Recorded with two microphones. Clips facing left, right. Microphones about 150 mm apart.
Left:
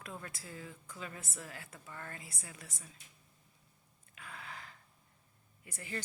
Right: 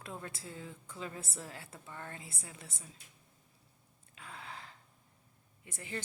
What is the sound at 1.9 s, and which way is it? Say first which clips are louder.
Speech: right 1 dB; 20° right (ahead or behind).